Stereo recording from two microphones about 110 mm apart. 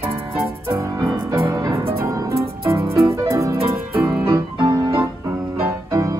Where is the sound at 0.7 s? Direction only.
30° right (ahead or behind).